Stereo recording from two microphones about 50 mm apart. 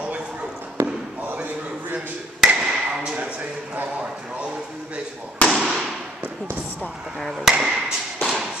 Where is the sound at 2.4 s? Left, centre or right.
Centre.